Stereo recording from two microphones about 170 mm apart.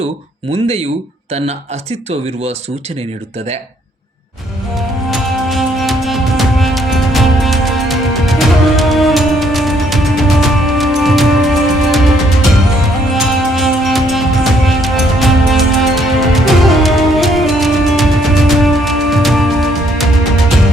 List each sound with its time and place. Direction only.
0.5 s speech: 35° right (ahead or behind)
5.1 s music: centre (ahead or behind)